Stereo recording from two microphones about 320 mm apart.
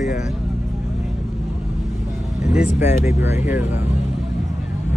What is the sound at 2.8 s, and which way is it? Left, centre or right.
Speech, left.